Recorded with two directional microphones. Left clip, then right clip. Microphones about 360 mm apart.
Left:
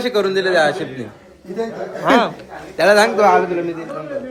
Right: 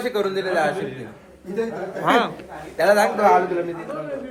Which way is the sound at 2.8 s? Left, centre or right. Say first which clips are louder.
Left 5 dB; left.